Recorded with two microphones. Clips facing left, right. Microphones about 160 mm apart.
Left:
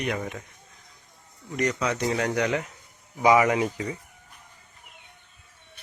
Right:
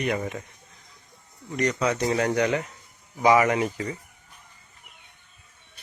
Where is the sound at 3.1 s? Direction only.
10° left (ahead or behind).